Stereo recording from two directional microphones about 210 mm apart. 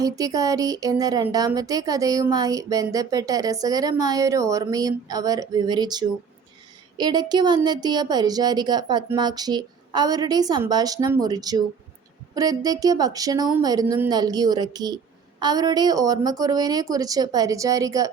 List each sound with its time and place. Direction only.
0.0 s a woman's voice: 15° right (ahead or behind)